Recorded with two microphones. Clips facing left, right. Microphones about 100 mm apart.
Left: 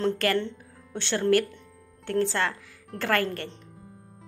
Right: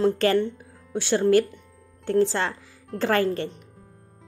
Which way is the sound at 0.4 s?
10° right (ahead or behind).